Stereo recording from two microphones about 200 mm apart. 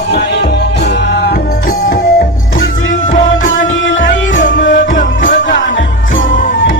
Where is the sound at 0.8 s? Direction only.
60° left (ahead or behind).